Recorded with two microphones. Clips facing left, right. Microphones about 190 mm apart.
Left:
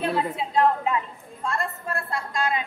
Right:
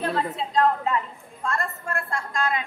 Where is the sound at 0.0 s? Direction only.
10° left (ahead or behind).